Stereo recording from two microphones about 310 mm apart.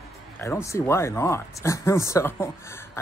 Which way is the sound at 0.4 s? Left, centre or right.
Centre.